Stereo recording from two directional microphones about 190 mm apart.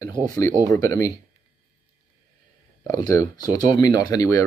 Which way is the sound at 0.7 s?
15° left (ahead or behind).